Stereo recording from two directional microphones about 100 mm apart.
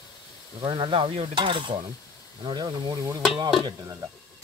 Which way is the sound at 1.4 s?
55° right (ahead or behind).